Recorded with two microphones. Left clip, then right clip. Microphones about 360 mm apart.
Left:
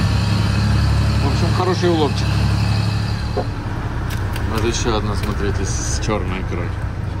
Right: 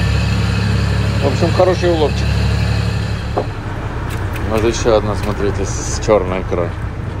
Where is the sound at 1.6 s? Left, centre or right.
Centre.